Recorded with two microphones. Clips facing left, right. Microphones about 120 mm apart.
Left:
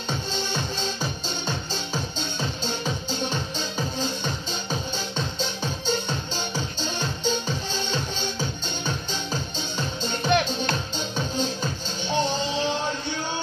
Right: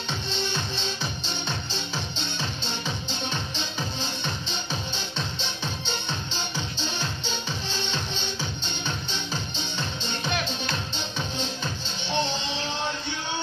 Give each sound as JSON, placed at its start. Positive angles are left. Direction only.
{"t": 1.7, "sound": "music", "side_deg": 45}
{"t": 10.0, "sound": "music", "side_deg": 50}